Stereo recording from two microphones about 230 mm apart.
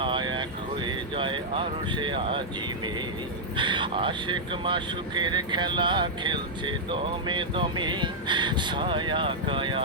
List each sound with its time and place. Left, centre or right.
0.0 s vehicle: right
0.9 s a sound: right
3.6 s speech: right